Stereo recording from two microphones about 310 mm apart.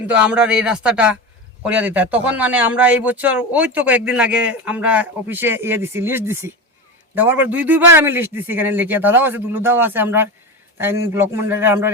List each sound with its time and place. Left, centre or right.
0.1 s a man's voice: centre